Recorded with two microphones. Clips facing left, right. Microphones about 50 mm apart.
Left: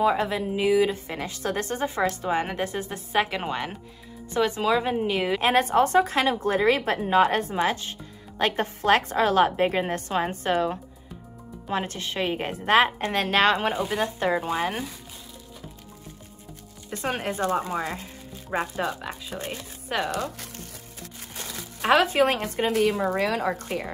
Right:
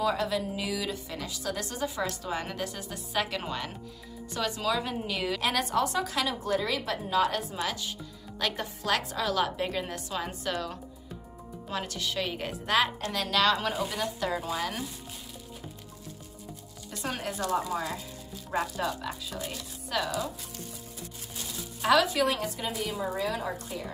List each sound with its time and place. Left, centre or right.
0.0 s a woman's voice: left
16.9 s a woman's voice: left
20.1 s speech: left
21.8 s a woman's voice: left
22.4 s a woman's voice: left
22.7 s speech: left